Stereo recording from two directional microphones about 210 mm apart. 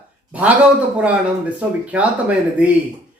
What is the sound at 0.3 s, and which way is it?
A man's voice, 5° right (ahead or behind).